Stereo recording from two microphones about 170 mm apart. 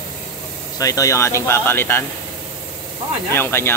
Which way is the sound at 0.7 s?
20° left (ahead or behind).